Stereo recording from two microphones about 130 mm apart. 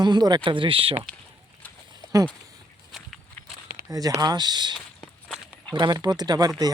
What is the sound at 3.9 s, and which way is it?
Speech, 25° right (ahead or behind).